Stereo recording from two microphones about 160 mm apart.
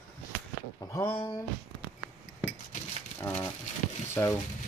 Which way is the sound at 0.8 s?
20° left (ahead or behind).